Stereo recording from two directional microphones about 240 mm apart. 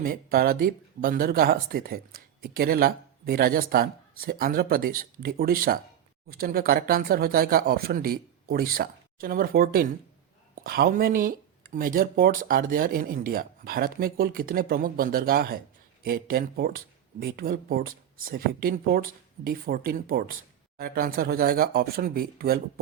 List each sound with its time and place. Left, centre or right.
0.0 s speech: right